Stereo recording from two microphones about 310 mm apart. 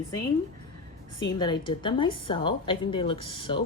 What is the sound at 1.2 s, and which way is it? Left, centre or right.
A woman's voice, centre.